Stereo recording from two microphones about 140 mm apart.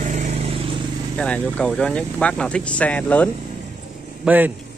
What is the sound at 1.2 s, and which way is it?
Speech, 5° left (ahead or behind).